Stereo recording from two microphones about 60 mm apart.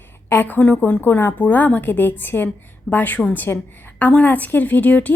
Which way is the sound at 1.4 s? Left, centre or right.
Left.